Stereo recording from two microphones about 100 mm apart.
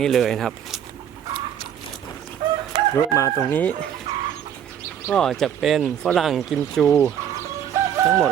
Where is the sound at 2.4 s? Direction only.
50° right (ahead or behind).